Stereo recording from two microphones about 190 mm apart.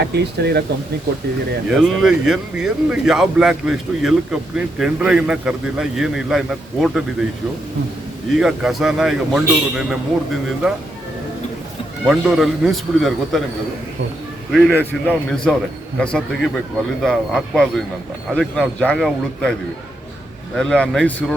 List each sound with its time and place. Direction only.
0.1 s speech: 60° right (ahead or behind)
1.7 s speech: centre (ahead or behind)
8.4 s speech: 5° right (ahead or behind)
12.0 s speech: centre (ahead or behind)
14.5 s speech: centre (ahead or behind)
20.6 s speech: 5° left (ahead or behind)